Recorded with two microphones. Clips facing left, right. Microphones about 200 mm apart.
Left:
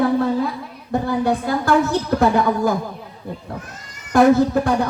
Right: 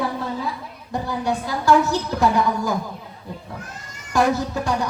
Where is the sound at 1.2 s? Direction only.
55° left (ahead or behind).